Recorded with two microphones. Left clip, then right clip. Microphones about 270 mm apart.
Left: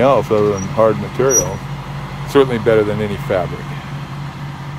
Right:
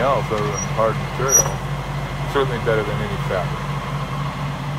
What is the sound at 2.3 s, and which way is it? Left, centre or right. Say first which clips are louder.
Speech: left 7 dB; left.